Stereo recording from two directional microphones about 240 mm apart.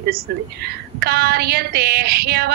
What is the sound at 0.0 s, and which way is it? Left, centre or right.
A woman's voice, right.